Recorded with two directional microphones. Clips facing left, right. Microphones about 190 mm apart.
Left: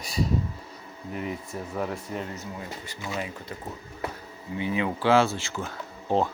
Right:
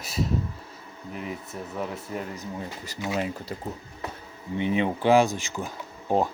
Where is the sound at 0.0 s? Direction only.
Centre (ahead or behind).